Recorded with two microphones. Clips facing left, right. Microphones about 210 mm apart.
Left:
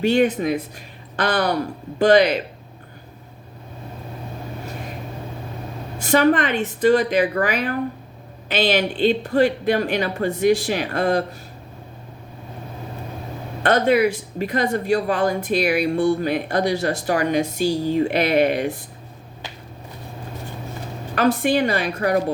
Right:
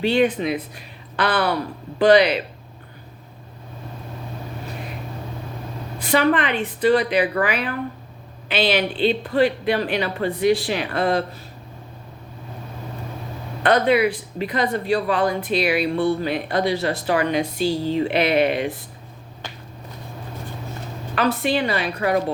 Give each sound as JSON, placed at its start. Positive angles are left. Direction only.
{"t": 0.0, "sound": "speech", "side_deg": 45}
{"t": 6.0, "sound": "speech", "side_deg": 45}
{"t": 13.6, "sound": "speech", "side_deg": 45}
{"t": 21.2, "sound": "speech", "side_deg": 45}